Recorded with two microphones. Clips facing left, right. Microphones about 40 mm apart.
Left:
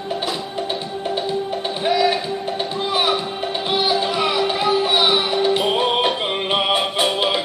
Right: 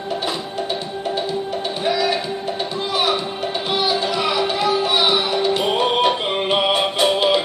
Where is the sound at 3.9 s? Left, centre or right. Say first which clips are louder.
Left 1 dB; centre.